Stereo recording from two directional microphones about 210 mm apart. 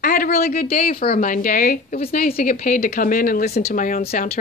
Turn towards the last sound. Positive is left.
turn(degrees=40)  # may be behind; listen again after turning